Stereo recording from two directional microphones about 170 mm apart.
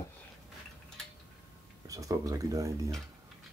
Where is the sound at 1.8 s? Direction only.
20° right (ahead or behind).